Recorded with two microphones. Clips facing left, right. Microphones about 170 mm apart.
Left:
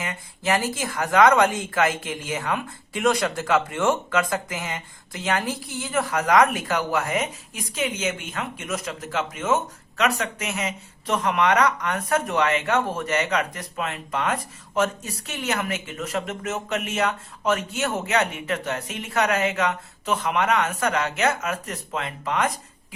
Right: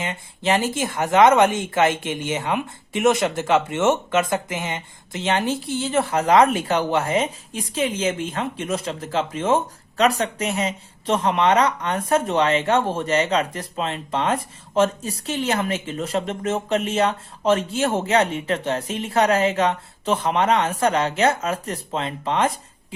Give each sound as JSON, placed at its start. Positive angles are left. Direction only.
{"t": 0.0, "sound": "speech", "side_deg": -25}